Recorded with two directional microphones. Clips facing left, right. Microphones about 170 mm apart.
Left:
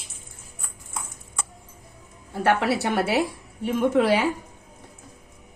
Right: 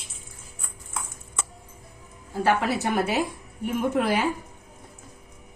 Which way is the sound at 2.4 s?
75° left (ahead or behind).